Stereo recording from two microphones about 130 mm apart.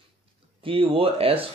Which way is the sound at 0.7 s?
45° right (ahead or behind).